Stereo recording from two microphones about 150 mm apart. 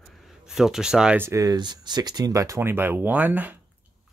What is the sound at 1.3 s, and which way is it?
Speech, 25° right (ahead or behind).